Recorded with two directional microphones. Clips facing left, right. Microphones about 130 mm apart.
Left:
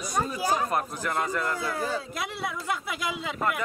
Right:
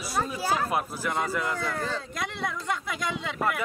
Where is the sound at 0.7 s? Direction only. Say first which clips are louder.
Even; 5° right (ahead or behind).